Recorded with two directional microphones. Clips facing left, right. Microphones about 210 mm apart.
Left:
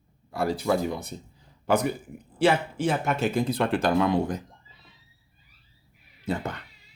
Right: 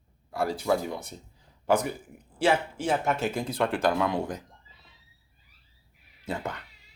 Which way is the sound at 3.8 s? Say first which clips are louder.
Left 5 dB; 30° left (ahead or behind).